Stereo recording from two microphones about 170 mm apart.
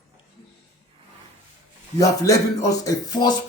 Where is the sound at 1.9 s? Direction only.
20° left (ahead or behind).